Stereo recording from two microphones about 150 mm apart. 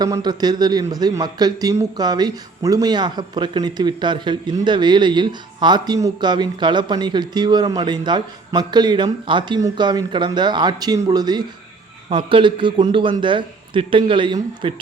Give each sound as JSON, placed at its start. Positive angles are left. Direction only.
{"t": 0.0, "sound": "a man's voice", "side_deg": -25}